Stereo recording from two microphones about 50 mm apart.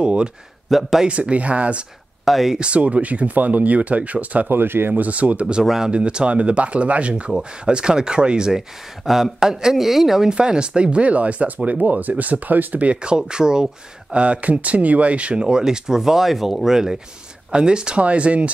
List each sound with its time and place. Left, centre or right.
0.0 s speech: centre
0.7 s speech: centre
1.0 s speech: right
2.2 s speech: centre
2.6 s speech: right
4.5 s speech: right
5.0 s speech: right
5.5 s speech: centre
5.9 s speech: right